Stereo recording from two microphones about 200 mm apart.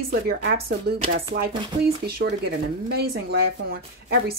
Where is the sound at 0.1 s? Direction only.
50° right (ahead or behind).